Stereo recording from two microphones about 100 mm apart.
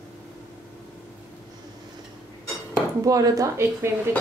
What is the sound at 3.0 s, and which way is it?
Speech, 35° right (ahead or behind).